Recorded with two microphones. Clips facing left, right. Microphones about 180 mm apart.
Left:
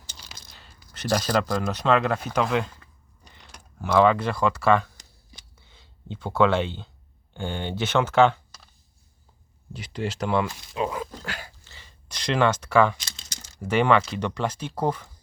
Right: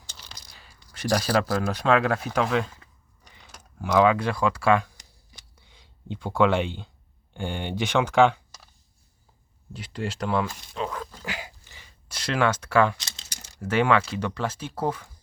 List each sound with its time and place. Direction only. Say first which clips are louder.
0.4 s a sound: left 1 dB; 10° right (ahead or behind)
0.9 s speech: even; 10° right (ahead or behind)
6.3 s speech: left 1 dB; 10° right (ahead or behind)
9.7 s speech: left 1 dB; 5° left (ahead or behind)
10.8 s speech: left 3 dB; 15° left (ahead or behind)
11.2 s a sound: right 1 dB; 15° right (ahead or behind)
13.7 s speech: left 1 dB; 5° right (ahead or behind)